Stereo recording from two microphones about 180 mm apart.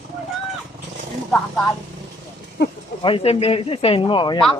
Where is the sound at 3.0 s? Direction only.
30° left (ahead or behind).